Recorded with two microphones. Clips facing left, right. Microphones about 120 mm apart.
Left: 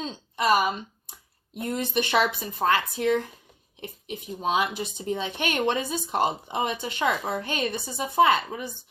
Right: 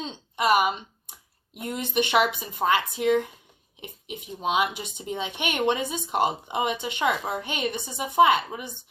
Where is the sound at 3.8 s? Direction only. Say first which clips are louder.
Left 2 dB; 15° right (ahead or behind).